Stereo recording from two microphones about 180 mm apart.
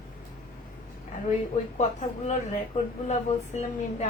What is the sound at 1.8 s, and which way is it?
A woman's voice, 40° left (ahead or behind).